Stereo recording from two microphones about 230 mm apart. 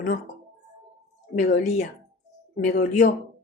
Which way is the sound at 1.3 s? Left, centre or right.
Left.